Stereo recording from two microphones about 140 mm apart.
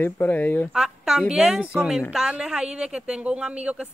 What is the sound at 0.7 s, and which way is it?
A woman's voice, 5° right (ahead or behind).